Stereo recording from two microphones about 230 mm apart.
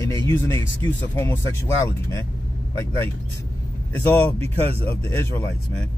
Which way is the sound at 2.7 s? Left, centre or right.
Centre.